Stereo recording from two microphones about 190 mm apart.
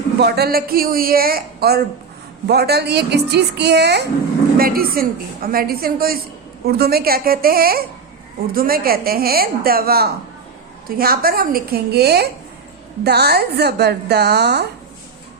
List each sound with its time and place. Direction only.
0.2 s a woman's voice: 60° right (ahead or behind)
4.5 s a woman's voice: 50° right (ahead or behind)